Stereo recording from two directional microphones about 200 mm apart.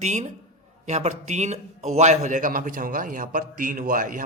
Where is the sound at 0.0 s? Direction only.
35° right (ahead or behind).